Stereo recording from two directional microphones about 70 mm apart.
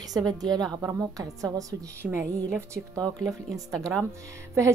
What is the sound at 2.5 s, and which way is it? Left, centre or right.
Speech, right.